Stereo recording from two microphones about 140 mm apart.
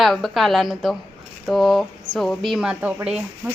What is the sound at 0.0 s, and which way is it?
Speech, centre (ahead or behind).